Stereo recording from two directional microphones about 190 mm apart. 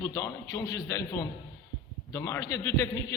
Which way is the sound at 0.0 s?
15° left (ahead or behind).